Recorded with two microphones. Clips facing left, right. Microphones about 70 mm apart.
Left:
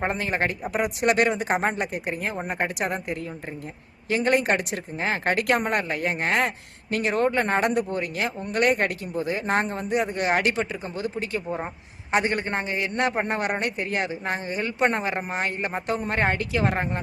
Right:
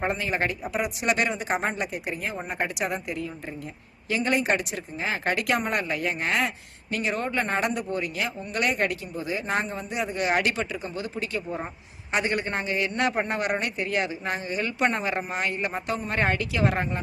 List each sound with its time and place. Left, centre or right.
0.1 s a man's voice: left
11.4 s speech: centre
12.1 s a man's voice: left